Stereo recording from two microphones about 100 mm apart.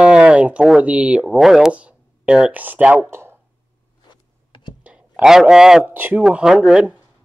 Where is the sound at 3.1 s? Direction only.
25° right (ahead or behind).